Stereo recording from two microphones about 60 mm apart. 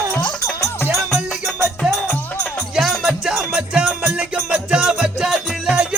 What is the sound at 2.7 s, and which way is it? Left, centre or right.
Music, centre.